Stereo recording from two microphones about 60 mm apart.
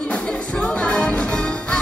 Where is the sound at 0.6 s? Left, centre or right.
Centre.